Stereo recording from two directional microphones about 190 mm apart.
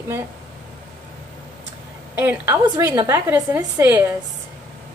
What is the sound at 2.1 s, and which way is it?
A woman's voice, 10° right (ahead or behind).